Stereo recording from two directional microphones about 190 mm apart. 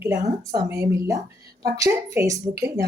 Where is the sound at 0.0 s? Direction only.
15° right (ahead or behind).